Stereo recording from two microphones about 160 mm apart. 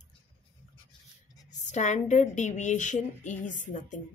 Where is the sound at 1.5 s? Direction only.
50° left (ahead or behind).